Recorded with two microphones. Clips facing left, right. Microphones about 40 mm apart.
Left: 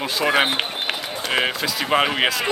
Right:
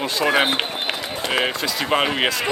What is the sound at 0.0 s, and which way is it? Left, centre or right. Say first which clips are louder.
Speech: even; centre.